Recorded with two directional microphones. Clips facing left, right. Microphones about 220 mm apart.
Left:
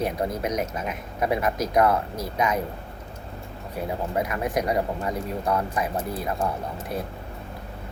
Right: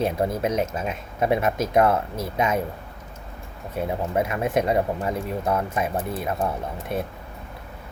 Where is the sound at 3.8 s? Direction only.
25° right (ahead or behind).